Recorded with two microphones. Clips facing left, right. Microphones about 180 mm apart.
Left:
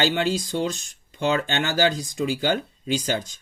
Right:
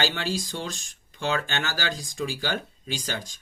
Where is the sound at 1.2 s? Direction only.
20° left (ahead or behind).